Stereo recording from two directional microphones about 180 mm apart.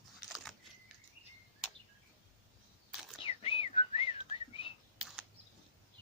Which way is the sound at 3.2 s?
30° left (ahead or behind).